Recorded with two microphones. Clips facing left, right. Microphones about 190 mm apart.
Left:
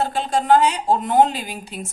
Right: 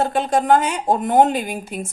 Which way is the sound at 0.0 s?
50° right (ahead or behind).